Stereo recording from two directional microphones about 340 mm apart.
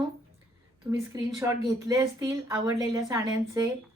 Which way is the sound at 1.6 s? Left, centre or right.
Centre.